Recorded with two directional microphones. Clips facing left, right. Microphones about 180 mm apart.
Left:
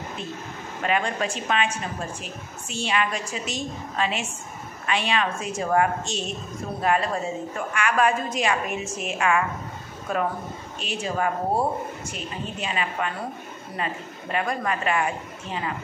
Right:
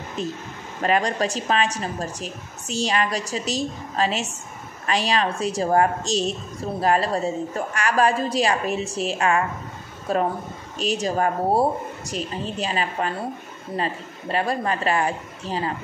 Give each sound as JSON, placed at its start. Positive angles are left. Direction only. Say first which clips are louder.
{"t": 0.2, "sound": "a woman's voice", "louder": "right 5 dB", "side_deg": -40}